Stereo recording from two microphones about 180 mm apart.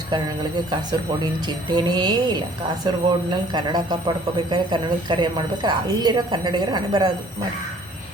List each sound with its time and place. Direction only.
0.7 s a woman's voice: 25° right (ahead or behind)